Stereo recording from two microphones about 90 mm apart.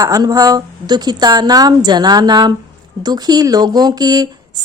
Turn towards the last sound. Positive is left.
turn(degrees=-45)  # may be behind; listen again after turning